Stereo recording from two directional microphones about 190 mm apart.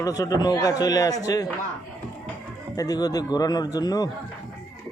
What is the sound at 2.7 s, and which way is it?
Speech, 20° left (ahead or behind).